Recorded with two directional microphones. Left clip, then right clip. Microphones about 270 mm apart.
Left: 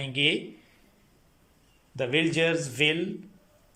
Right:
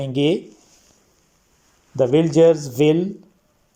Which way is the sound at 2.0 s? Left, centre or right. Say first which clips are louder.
Right 10 dB; right.